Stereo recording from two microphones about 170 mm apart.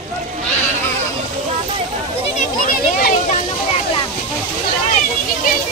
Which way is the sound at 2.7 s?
55° left (ahead or behind).